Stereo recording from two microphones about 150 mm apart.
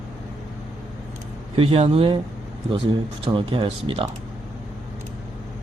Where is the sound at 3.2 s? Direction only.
35° right (ahead or behind).